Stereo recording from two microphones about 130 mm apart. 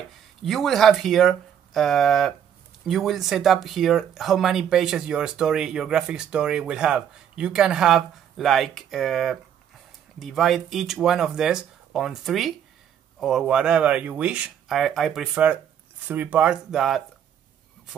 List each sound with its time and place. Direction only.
0.4 s speech: centre (ahead or behind)